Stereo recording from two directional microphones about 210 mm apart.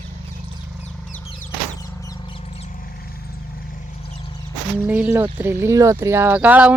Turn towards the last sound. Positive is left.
turn(degrees=-5)  # may be behind; listen again after turning